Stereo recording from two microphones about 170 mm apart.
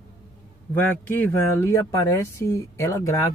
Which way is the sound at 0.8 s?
10° left (ahead or behind).